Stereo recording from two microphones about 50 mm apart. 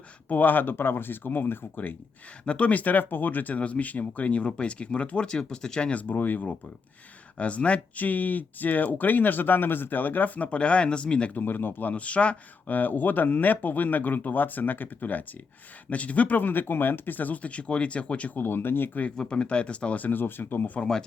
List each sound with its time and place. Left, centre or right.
0.3 s speech: left
2.5 s speech: left
5.9 s speech: left
11.3 s speech: left
12.7 s speech: left
18.3 s speech: left
19.1 s speech: centre; by 20.7 s left